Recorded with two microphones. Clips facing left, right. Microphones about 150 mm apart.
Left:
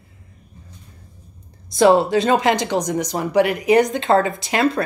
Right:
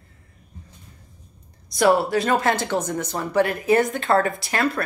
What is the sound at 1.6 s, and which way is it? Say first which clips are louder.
Speech: left 4 dB; 25° left (ahead or behind).